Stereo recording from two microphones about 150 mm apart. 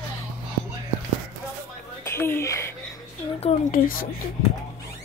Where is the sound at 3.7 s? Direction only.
70° left (ahead or behind).